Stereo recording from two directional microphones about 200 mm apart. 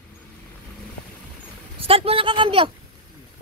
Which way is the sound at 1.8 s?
30° right (ahead or behind).